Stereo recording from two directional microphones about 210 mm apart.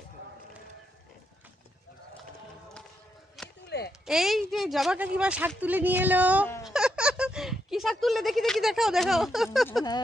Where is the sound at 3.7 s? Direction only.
50° left (ahead or behind).